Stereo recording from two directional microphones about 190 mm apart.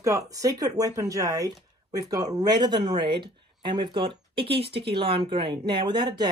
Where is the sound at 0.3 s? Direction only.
20° right (ahead or behind).